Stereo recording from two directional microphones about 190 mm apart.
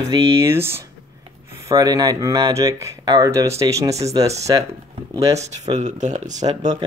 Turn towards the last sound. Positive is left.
turn(degrees=-40)  # may be behind; listen again after turning